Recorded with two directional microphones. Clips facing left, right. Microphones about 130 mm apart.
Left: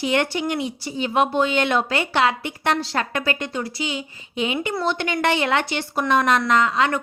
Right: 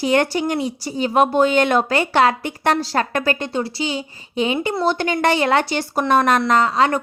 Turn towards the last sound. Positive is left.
turn(degrees=-35)  # may be behind; listen again after turning